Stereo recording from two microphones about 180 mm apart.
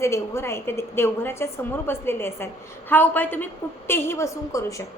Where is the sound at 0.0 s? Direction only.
15° left (ahead or behind).